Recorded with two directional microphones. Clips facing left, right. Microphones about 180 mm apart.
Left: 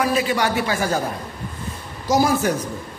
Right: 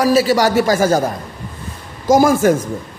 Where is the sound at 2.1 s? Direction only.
50° right (ahead or behind).